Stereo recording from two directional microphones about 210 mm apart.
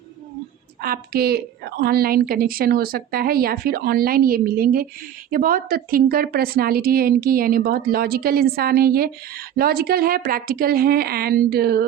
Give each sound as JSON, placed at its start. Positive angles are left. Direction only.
{"t": 0.8, "sound": "a woman's voice", "side_deg": -45}